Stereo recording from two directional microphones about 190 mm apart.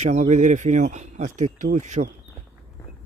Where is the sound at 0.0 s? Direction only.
40° right (ahead or behind).